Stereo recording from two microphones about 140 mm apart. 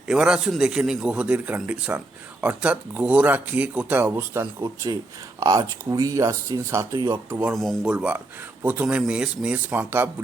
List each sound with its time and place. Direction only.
0.1 s a man's voice: 5° right (ahead or behind)
7.5 s a man's voice: centre (ahead or behind)
7.9 s speech: 10° right (ahead or behind)